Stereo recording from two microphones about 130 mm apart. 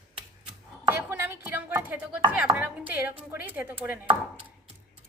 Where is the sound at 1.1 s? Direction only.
15° right (ahead or behind).